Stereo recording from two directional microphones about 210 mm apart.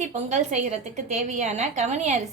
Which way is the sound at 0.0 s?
35° right (ahead or behind).